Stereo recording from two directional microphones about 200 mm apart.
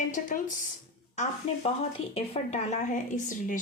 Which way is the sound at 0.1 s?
40° left (ahead or behind).